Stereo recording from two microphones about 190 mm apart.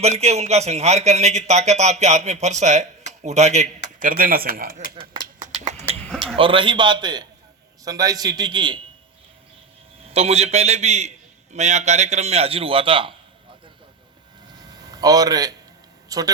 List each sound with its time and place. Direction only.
0.2 s a man's voice: 35° right (ahead or behind)
4.0 s speech: 50° right (ahead or behind)
5.5 s a sound: 35° right (ahead or behind)
6.1 s a man's voice: 30° right (ahead or behind)
10.1 s a man's voice: 35° right (ahead or behind)
14.9 s speech: 20° right (ahead or behind)